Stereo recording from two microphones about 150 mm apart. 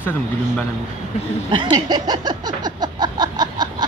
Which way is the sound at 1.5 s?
30° right (ahead or behind).